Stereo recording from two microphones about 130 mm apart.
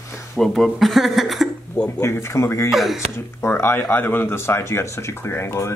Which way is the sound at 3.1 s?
20° left (ahead or behind).